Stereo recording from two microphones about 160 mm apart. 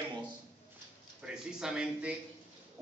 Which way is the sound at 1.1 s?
5° right (ahead or behind).